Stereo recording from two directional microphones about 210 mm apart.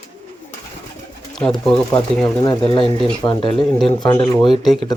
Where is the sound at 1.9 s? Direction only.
20° left (ahead or behind).